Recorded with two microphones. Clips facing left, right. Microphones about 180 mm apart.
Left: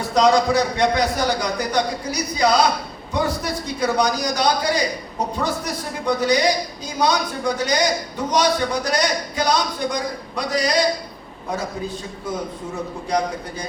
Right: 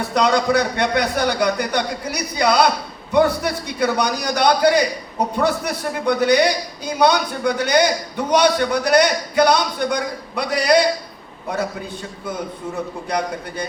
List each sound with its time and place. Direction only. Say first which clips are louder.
0.0 s a man's voice: left 1 dB; 60° right (ahead or behind)
13.1 s a man's voice: left 3 dB; 60° right (ahead or behind)